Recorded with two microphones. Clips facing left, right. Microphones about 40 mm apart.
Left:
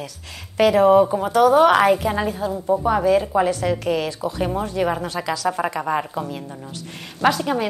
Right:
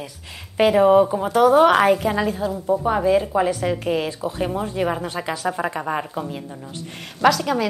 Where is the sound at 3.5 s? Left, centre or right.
Right.